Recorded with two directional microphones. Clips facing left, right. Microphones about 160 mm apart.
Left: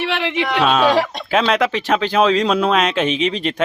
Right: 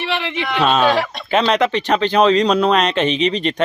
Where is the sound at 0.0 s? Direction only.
10° left (ahead or behind).